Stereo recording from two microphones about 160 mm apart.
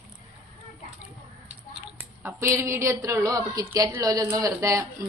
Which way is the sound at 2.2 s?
15° right (ahead or behind).